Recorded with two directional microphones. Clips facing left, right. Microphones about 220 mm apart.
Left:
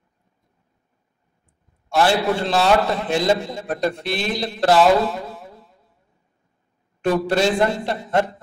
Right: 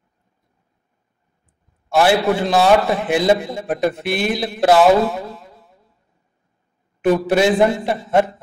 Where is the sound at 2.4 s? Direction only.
55° right (ahead or behind).